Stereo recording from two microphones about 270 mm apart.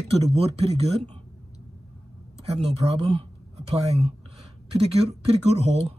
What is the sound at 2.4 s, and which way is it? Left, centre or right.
Speech, right.